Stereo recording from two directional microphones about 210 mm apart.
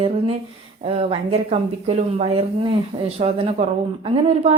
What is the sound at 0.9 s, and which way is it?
A woman's voice, 30° right (ahead or behind).